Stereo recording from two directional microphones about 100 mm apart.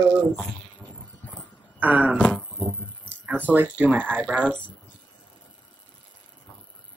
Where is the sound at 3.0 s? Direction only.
20° right (ahead or behind).